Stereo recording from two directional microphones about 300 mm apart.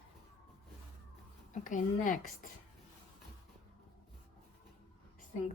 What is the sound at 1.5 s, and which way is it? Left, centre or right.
A woman's voice, left.